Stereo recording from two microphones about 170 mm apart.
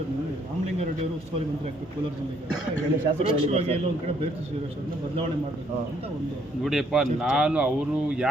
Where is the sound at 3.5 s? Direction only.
35° right (ahead or behind).